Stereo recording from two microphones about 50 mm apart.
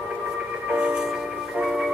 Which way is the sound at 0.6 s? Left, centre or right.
Centre.